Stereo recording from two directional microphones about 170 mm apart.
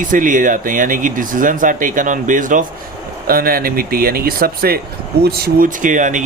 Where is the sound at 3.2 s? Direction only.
60° right (ahead or behind).